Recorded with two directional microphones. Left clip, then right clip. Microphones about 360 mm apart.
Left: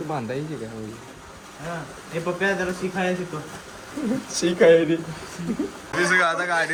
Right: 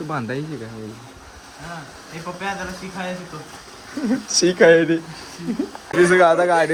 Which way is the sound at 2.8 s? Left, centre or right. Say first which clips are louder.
Left 5 dB; centre.